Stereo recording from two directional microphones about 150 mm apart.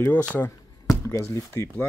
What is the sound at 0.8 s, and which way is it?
Speech, 20° left (ahead or behind).